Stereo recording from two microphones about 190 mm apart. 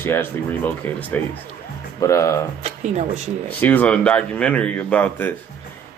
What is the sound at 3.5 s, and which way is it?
Speech, 10° left (ahead or behind).